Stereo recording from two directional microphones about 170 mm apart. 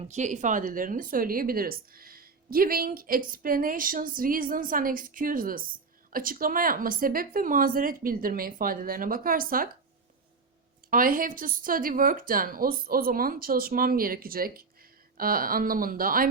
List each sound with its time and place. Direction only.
0.1 s speech: 45° right (ahead or behind)
10.8 s speech: 55° right (ahead or behind)